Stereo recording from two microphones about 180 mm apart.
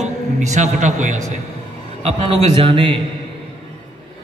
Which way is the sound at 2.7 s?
30° right (ahead or behind).